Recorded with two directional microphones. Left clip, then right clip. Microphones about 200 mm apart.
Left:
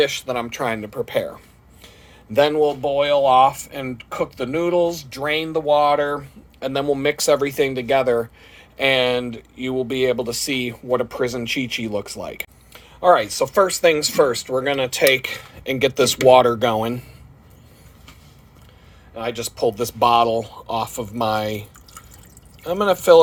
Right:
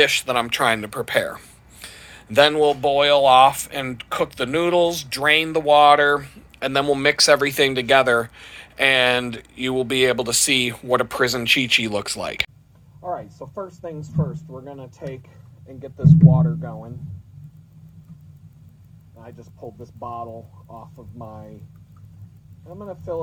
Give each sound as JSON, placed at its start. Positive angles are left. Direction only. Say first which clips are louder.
{"t": 0.0, "sound": "speech", "louder": "right 3 dB", "side_deg": 10}
{"t": 13.0, "sound": "speech", "louder": "left 15 dB", "side_deg": 40}
{"t": 15.6, "sound": "speech", "louder": "left 10 dB", "side_deg": 65}
{"t": 19.1, "sound": "speech", "louder": "left 18 dB", "side_deg": 35}
{"t": 22.6, "sound": "speech", "louder": "left 17 dB", "side_deg": 50}